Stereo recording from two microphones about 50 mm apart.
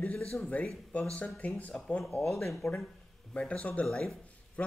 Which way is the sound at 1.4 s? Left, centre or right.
Left.